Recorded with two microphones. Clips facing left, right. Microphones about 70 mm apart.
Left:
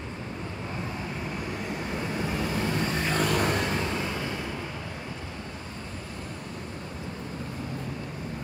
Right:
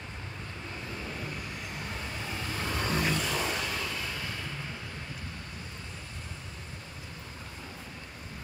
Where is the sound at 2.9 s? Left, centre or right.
Left.